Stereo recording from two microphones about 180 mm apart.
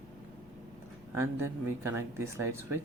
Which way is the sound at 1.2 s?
15° right (ahead or behind).